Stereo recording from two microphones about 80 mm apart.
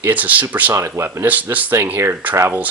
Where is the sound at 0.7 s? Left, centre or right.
Right.